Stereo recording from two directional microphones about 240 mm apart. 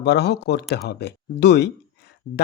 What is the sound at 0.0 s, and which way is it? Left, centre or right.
Speech, left.